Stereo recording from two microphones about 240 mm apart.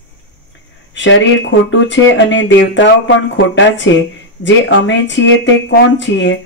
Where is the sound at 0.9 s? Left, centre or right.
Left.